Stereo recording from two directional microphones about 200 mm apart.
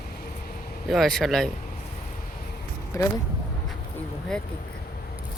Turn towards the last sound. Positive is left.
turn(degrees=5)  # may be behind; listen again after turning